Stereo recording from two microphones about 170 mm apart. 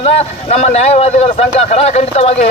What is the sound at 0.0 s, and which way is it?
A man's voice, 35° left (ahead or behind).